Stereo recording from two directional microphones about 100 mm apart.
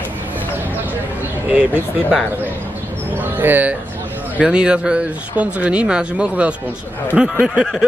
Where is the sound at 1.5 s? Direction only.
10° right (ahead or behind).